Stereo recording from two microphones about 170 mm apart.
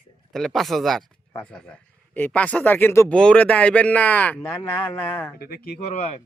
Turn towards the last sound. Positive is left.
turn(degrees=50)  # may be behind; listen again after turning